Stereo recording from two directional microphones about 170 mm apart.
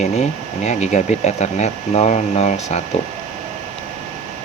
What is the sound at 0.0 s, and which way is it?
Speech, 40° left (ahead or behind).